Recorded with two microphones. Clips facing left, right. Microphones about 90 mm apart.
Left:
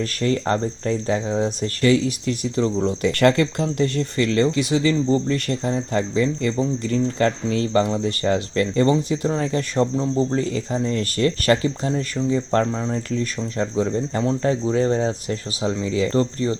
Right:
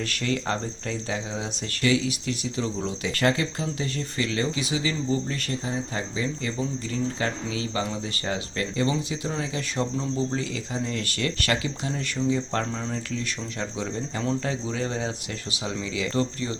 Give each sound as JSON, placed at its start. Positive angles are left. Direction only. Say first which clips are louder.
{"t": 0.0, "sound": "speech", "louder": "left 6 dB", "side_deg": 40}